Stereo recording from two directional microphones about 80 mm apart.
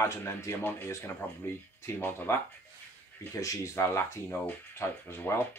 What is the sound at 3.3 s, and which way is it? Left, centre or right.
Speech, left.